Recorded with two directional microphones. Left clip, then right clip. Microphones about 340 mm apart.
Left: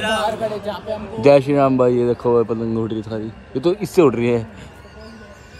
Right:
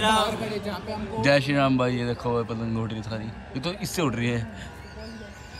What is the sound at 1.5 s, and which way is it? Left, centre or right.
Speech, right.